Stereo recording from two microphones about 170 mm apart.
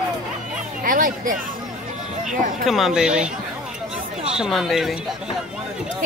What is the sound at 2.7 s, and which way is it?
Speech, 5° right (ahead or behind).